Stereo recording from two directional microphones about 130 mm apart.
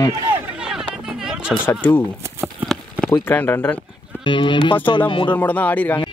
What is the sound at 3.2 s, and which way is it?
Speech, 15° left (ahead or behind).